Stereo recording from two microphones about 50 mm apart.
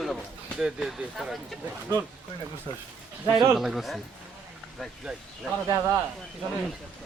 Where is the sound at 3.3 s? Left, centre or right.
Centre.